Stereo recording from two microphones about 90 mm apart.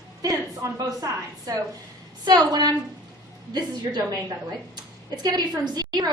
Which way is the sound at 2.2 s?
50° right (ahead or behind).